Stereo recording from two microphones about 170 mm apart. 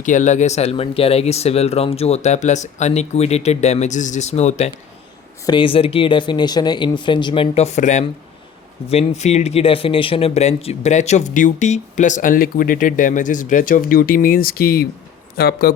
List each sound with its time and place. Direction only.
0.0 s speech: 50° left (ahead or behind)
5.5 s speech: 30° left (ahead or behind); by 15.7 s 65° left (ahead or behind)